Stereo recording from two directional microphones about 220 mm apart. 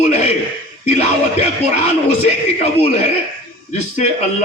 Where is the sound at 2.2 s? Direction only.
30° left (ahead or behind).